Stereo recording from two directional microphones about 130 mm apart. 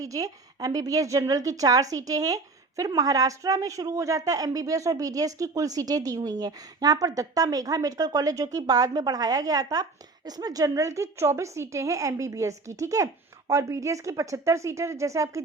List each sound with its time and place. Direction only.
0.0 s a woman's voice: 25° right (ahead or behind)